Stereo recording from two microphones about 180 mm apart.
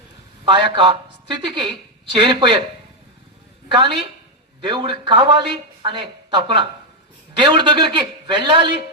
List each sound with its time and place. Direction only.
0.4 s a woman's voice: 25° right (ahead or behind)
3.7 s a woman's voice: 30° right (ahead or behind)